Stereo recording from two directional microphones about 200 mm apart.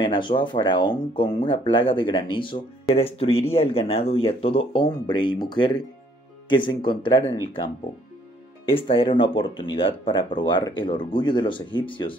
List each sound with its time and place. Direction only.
0.0 s speech: 25° left (ahead or behind)